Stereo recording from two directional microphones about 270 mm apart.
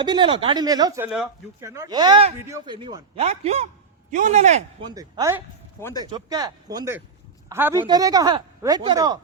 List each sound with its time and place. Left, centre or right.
0.0 s a man's voice: centre
4.9 s speech: centre